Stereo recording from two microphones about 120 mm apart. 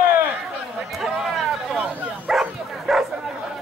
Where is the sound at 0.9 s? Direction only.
Centre (ahead or behind).